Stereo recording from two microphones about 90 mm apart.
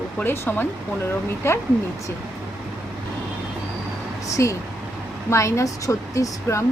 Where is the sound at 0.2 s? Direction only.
25° left (ahead or behind).